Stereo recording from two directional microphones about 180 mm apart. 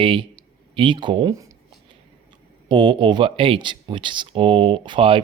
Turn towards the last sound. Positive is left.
turn(degrees=-30)  # may be behind; listen again after turning